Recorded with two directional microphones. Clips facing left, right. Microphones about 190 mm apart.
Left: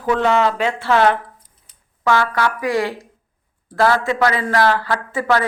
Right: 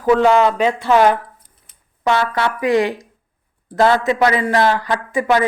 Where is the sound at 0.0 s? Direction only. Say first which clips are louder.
Right 4 dB; 10° right (ahead or behind).